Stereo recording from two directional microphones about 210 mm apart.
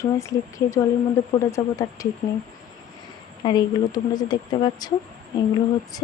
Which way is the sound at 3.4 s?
20° left (ahead or behind).